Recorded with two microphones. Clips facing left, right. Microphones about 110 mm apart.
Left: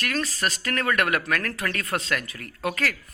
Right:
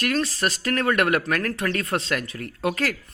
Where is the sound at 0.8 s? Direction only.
30° right (ahead or behind).